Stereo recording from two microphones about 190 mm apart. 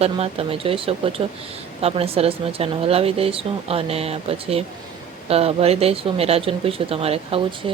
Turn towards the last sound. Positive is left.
turn(degrees=-30)  # may be behind; listen again after turning